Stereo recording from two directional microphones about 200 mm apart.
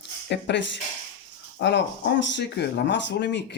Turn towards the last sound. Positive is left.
turn(degrees=60)  # may be behind; listen again after turning